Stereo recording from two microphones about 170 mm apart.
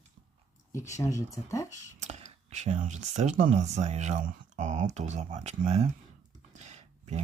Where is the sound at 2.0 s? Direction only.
40° right (ahead or behind).